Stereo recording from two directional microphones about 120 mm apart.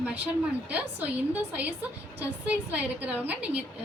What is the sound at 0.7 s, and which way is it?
A woman's voice, 15° right (ahead or behind).